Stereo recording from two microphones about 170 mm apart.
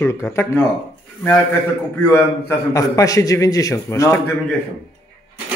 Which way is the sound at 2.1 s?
15° left (ahead or behind).